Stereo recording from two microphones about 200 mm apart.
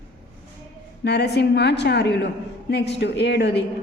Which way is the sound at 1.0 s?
55° left (ahead or behind).